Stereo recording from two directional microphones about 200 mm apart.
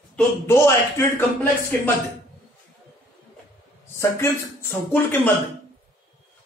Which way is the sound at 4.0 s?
15° left (ahead or behind).